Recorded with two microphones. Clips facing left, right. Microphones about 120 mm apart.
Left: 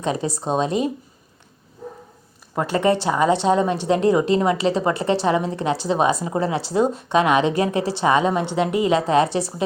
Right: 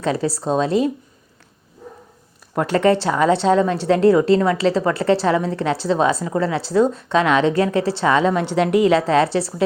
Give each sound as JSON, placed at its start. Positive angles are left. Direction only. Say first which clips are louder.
{"t": 0.0, "sound": "a woman's voice", "louder": "right 3 dB", "side_deg": 20}
{"t": 2.6, "sound": "a woman's voice", "louder": "right 3 dB", "side_deg": 5}